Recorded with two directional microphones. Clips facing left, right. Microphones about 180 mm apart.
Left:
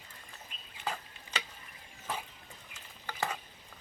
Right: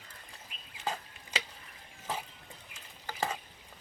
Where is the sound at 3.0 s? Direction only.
35° right (ahead or behind).